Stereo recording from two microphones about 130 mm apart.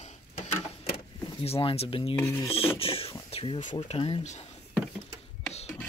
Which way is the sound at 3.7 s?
40° left (ahead or behind).